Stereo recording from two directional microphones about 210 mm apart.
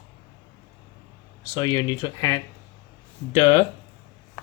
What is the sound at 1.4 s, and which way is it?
Speech, 20° left (ahead or behind).